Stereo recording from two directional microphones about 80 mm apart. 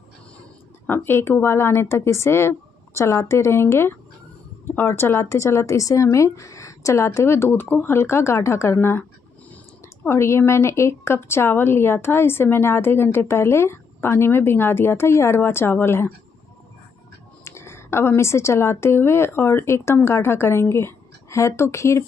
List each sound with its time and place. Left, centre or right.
0.8 s a woman's voice: left
10.0 s a woman's voice: left
17.5 s a woman's voice: left